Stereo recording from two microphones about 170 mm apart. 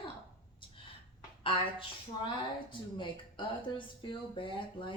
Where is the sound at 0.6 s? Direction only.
30° left (ahead or behind).